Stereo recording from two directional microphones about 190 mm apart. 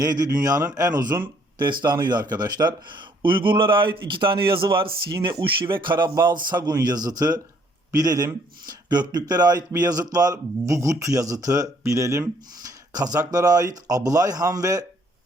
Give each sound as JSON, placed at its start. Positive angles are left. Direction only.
{"t": 0.0, "sound": "speech", "side_deg": -20}